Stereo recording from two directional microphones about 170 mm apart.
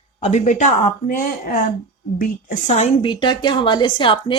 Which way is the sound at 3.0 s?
30° left (ahead or behind).